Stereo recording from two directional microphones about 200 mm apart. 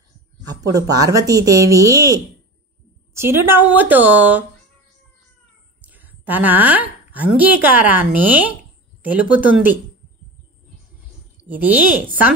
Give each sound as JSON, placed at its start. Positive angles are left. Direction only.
{"t": 0.5, "sound": "speech", "side_deg": -20}
{"t": 5.8, "sound": "a woman's voice", "side_deg": -10}